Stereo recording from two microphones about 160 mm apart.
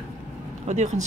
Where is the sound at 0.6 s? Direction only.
45° right (ahead or behind).